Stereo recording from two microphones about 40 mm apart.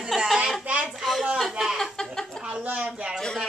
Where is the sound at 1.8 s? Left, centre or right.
Centre.